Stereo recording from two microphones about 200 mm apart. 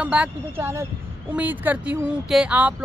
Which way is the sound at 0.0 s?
5° right (ahead or behind).